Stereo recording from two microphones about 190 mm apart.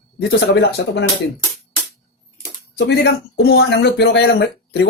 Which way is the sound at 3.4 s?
60° left (ahead or behind).